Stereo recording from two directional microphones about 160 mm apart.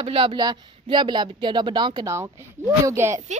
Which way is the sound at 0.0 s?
35° right (ahead or behind).